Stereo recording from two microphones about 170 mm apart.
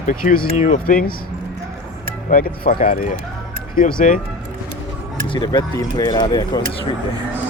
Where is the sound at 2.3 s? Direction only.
55° left (ahead or behind).